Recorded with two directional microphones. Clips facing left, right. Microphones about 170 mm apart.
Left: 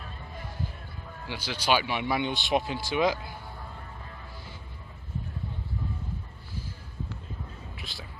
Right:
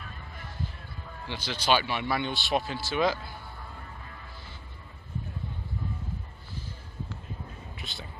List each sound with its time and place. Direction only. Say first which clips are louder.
1.3 s speech: even; 10° left (ahead or behind)
7.8 s whispering: right 2 dB; centre (ahead or behind)